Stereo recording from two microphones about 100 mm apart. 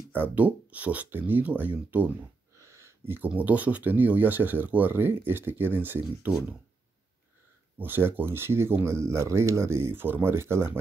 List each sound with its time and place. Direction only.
0.1 s speech: 20° right (ahead or behind)
2.5 s speech: 30° right (ahead or behind)
7.8 s speech: 20° right (ahead or behind)